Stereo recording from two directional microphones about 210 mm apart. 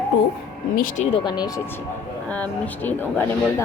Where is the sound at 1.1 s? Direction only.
20° left (ahead or behind).